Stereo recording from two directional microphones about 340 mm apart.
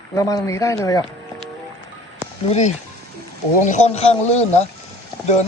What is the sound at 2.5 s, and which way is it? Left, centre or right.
A man's voice, centre.